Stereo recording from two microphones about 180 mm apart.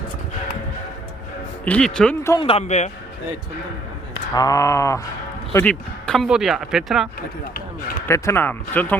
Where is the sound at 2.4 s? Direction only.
35° left (ahead or behind).